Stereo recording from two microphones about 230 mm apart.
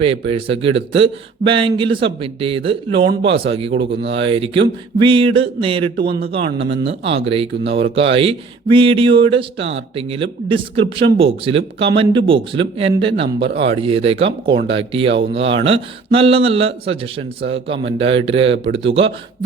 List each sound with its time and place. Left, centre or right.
0.0 s speech: right
4.0 s speech: right
4.3 s speech: right
6.0 s speech: right
6.7 s speech: right
13.4 s speech: right
13.7 s speech: right
14.5 s speech: right
14.8 s speech: right